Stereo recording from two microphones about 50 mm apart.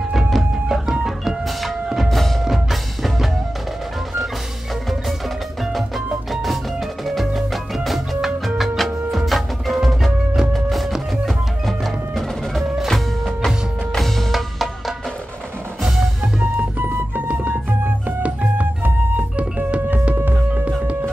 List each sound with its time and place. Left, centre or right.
0.1 s music: centre
6.3 s music: centre
16.5 s music: right
20.2 s music: right